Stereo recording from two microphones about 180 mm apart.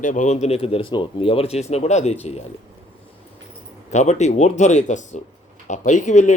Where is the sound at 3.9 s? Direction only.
40° left (ahead or behind).